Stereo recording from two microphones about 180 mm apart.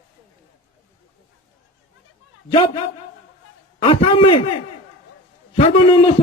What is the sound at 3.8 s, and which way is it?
Speech, 30° left (ahead or behind).